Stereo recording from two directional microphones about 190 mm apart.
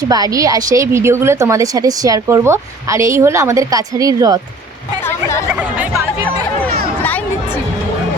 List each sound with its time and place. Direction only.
0.1 s a woman's voice: 20° right (ahead or behind)